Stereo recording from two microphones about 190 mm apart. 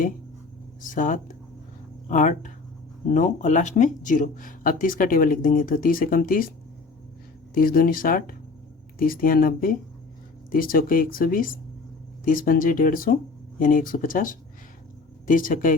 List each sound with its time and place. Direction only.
0.8 s speech: 45° left (ahead or behind)
7.5 s speech: 50° left (ahead or behind)